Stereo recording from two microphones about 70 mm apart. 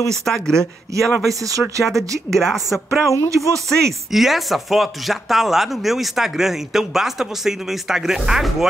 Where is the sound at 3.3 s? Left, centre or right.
Right.